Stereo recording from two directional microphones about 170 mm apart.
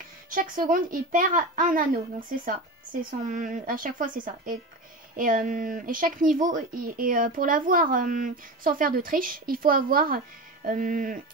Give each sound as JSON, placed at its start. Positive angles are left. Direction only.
{"t": 0.3, "sound": "speech", "side_deg": -55}